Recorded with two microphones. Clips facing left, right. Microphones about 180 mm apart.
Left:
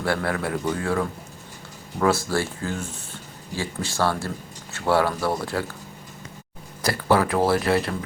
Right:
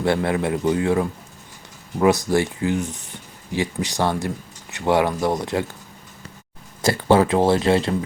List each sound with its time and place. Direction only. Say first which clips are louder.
0.0 s speech: right 5 dB; 20° right (ahead or behind)
6.8 s speech: right 4 dB; 25° right (ahead or behind)